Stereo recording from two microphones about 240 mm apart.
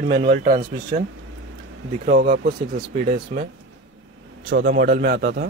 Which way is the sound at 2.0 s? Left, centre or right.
Right.